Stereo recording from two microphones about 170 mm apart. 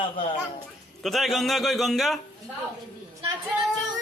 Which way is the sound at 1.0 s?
Centre (ahead or behind).